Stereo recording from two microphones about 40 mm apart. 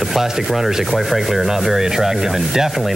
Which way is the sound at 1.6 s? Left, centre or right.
Centre.